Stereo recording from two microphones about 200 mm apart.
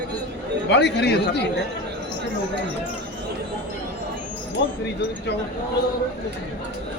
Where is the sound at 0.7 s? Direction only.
60° left (ahead or behind).